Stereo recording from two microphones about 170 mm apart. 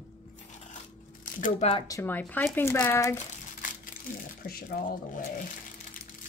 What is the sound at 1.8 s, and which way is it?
Speech, 15° left (ahead or behind).